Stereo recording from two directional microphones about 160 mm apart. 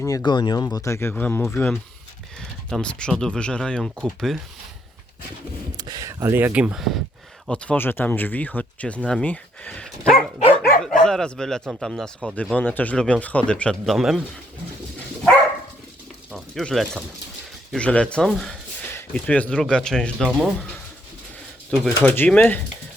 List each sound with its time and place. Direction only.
0.0 s speech: 25° left (ahead or behind); by 4.4 s centre (ahead or behind)
5.7 s speech: 25° right (ahead or behind); by 9.9 s 5° left (ahead or behind)
11.0 s speech: 5° left (ahead or behind)
16.3 s speech: centre (ahead or behind)
21.7 s speech: 5° left (ahead or behind)